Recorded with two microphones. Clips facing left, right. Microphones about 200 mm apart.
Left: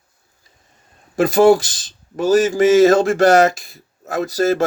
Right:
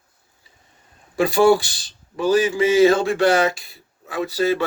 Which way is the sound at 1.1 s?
45° left (ahead or behind).